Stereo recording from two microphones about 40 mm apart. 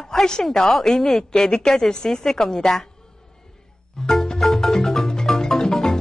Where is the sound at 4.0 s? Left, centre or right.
Centre.